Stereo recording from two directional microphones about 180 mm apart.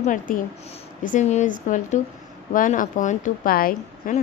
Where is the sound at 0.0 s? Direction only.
45° left (ahead or behind).